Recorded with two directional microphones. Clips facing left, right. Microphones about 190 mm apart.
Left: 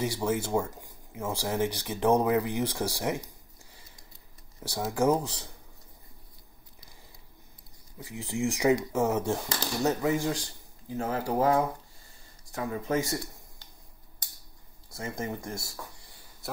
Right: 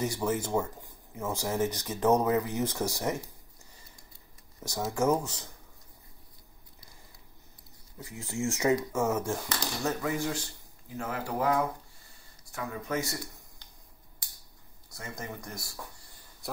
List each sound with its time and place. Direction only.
0.0 s speech: 10° left (ahead or behind)
4.6 s speech: 10° left (ahead or behind)
8.0 s speech: 15° left (ahead or behind)
11.0 s speech: 40° left (ahead or behind)
11.3 s speech: 30° left (ahead or behind)
14.9 s speech: 25° left (ahead or behind)